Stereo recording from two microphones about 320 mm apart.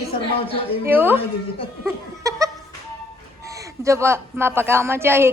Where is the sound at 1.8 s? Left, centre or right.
Centre.